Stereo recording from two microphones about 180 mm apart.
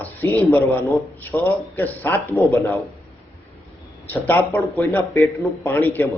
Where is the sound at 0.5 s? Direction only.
15° left (ahead or behind).